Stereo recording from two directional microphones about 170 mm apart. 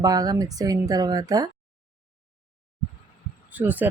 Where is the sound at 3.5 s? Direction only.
10° right (ahead or behind).